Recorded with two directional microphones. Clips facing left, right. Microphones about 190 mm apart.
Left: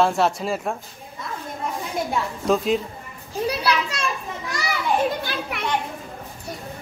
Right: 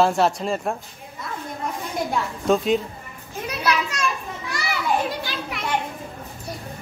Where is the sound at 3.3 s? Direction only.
35° left (ahead or behind).